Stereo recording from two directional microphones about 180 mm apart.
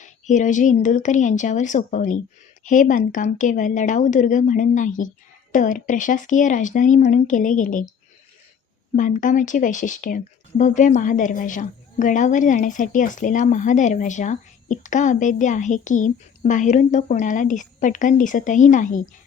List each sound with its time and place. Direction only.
0.0 s speech: 45° left (ahead or behind)
9.0 s speech: 45° left (ahead or behind)